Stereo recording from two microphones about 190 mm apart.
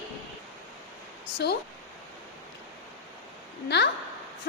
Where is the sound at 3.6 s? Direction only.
60° left (ahead or behind).